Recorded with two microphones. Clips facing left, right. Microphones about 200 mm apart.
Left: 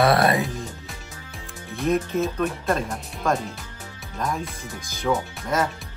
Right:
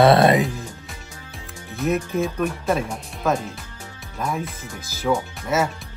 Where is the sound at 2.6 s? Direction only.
Centre (ahead or behind).